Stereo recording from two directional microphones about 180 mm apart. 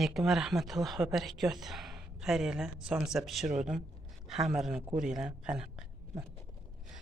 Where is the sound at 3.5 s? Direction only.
40° right (ahead or behind).